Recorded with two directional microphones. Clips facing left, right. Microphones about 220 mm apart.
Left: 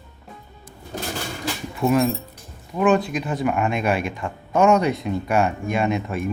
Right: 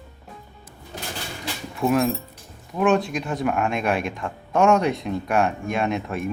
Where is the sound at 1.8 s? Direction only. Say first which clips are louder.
Left 1 dB; centre (ahead or behind).